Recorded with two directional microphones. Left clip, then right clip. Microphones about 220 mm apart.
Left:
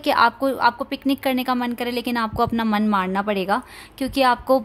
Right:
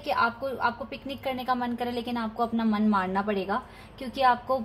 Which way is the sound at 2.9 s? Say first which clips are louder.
Left 4 dB; 70° left (ahead or behind).